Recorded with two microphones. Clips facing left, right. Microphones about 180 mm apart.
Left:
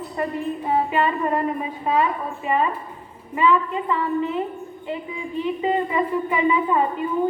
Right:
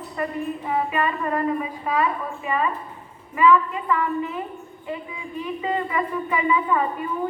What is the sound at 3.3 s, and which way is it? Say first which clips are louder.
A woman's voice: right 1 dB; 25° left (ahead or behind).